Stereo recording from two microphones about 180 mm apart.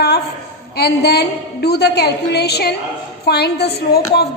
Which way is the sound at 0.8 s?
65° left (ahead or behind).